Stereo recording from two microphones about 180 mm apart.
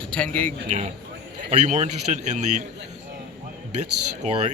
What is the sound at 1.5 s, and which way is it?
Speech, 40° right (ahead or behind).